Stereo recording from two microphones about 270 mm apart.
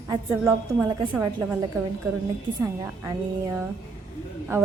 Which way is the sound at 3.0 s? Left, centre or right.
Centre.